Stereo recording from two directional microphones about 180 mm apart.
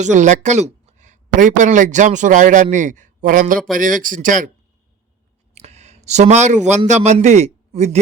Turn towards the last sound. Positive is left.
turn(degrees=-40)  # may be behind; listen again after turning